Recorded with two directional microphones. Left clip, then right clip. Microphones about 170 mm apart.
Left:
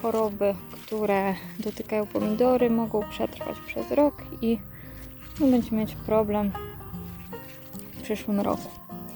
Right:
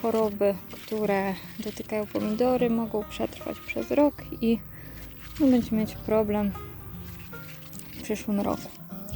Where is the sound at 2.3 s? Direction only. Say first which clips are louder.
Left 3 dB; centre (ahead or behind).